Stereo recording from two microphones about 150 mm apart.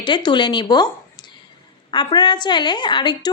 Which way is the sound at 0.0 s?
30° left (ahead or behind).